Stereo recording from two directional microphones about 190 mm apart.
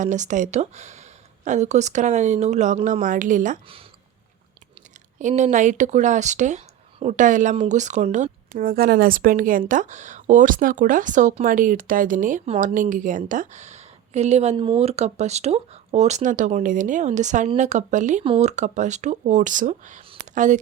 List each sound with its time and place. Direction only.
0.0 s speech: 40° right (ahead or behind)
5.2 s speech: 40° right (ahead or behind)